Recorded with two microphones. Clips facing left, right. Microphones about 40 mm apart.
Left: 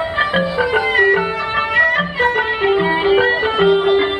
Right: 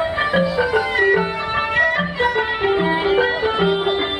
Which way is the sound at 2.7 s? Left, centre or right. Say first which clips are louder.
Left 4 dB; centre.